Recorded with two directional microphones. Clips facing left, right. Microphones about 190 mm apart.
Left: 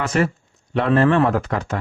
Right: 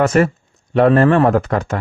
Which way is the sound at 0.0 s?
50° right (ahead or behind).